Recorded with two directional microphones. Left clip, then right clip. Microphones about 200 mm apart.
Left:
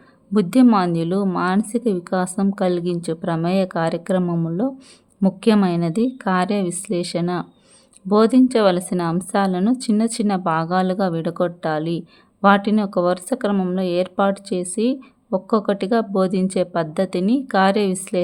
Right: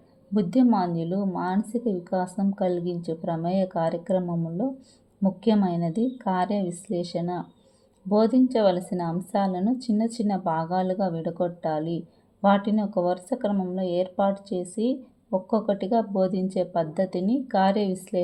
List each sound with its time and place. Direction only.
0.3 s a woman's voice: 30° left (ahead or behind)